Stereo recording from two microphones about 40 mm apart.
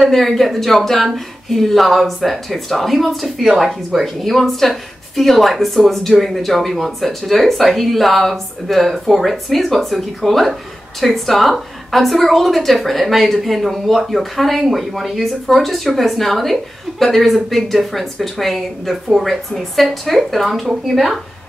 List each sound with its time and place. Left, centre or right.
0.0 s speech: centre